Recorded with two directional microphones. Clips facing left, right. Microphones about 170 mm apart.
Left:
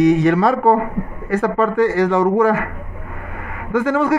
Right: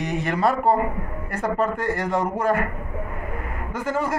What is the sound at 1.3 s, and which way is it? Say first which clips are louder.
A man's voice: left 7 dB; 90° left.